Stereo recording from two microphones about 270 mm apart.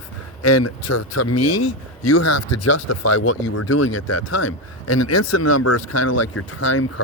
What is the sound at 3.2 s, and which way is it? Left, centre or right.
Speech, left.